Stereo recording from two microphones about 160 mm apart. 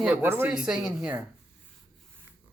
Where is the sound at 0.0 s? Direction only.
10° right (ahead or behind).